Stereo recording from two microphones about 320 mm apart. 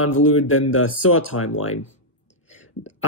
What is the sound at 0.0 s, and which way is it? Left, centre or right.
Speech, left.